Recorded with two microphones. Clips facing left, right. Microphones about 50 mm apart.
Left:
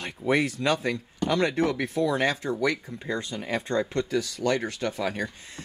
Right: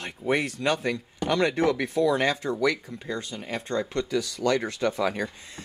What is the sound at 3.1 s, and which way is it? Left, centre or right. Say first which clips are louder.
Speech: left 3 dB; left.